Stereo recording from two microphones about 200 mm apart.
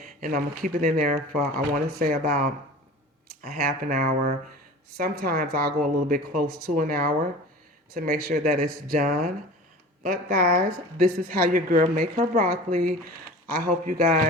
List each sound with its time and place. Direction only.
0.2 s a woman's voice: 45° right (ahead or behind)
3.5 s a woman's voice: 45° right (ahead or behind)